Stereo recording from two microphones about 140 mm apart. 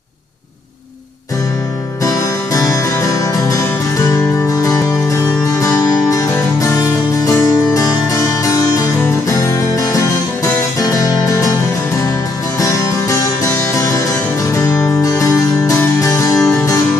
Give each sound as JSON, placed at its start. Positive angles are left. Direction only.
{"t": 2.0, "sound": "music", "side_deg": 25}
{"t": 7.7, "sound": "music", "side_deg": 25}
{"t": 12.5, "sound": "music", "side_deg": 25}